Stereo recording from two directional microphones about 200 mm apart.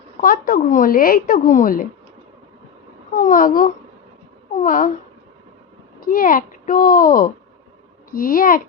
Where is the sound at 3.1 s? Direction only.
45° left (ahead or behind).